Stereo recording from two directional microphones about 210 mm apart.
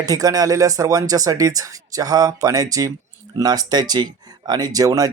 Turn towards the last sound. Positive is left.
turn(degrees=-15)  # may be behind; listen again after turning